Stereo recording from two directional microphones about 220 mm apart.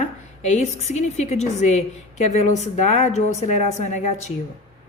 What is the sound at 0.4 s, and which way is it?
A woman's voice, 30° left (ahead or behind).